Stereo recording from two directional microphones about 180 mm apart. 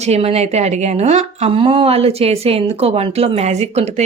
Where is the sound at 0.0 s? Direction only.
35° right (ahead or behind).